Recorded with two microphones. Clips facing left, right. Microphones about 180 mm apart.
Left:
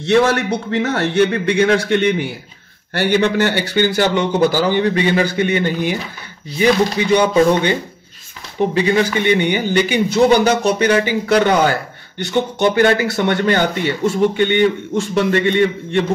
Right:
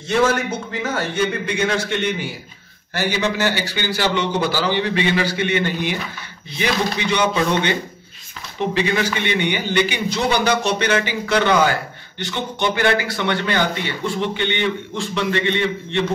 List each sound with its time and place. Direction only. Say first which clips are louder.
0.0 s a man's voice: left 4 dB; 70° left (ahead or behind); by 5.9 s 40° left (ahead or behind)
6.6 s music: left 7 dB; 40° left (ahead or behind)
8.5 s music: left 5 dB; 35° left (ahead or behind)
9.3 s a man's voice: left 5 dB; 40° left (ahead or behind)